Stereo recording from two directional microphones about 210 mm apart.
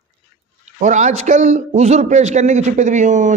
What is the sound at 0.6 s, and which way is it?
Speech, 35° right (ahead or behind).